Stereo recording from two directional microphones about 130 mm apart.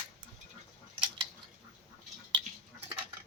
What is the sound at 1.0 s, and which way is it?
Scissors, 40° right (ahead or behind).